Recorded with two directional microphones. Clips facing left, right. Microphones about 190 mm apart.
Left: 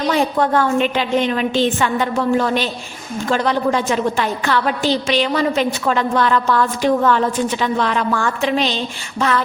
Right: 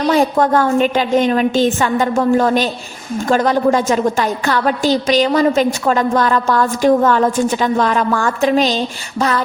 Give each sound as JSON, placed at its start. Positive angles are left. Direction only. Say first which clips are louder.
{"t": 0.1, "sound": "a woman's voice", "louder": "right 4 dB", "side_deg": -45}